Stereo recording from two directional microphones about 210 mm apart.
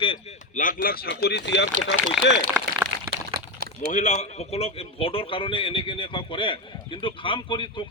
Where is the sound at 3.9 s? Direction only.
35° left (ahead or behind).